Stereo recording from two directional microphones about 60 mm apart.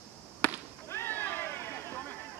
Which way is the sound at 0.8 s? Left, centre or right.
Left.